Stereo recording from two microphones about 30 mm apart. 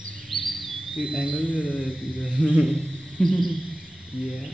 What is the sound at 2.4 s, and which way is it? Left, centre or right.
Speech, centre.